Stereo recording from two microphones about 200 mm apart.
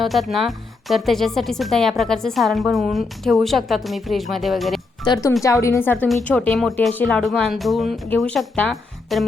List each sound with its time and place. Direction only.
0.0 s a woman's voice: centre (ahead or behind)
5.0 s a woman's voice: 20° left (ahead or behind); by 9.2 s centre (ahead or behind)